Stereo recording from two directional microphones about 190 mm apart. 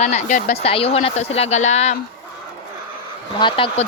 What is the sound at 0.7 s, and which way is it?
Speech, 30° left (ahead or behind).